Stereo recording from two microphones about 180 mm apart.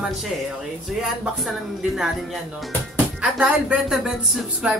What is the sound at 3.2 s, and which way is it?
Speech, 5° right (ahead or behind).